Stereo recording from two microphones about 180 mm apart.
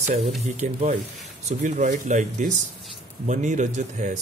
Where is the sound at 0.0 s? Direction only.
35° right (ahead or behind).